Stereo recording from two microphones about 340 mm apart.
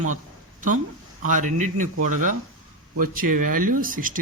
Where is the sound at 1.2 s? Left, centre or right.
Right.